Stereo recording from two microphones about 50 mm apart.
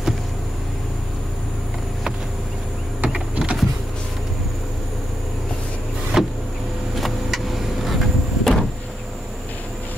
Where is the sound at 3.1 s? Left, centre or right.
Centre.